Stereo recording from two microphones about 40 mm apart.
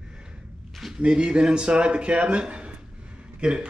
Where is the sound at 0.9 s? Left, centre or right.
Right.